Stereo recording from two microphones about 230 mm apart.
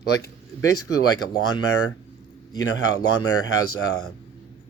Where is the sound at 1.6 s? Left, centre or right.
Left.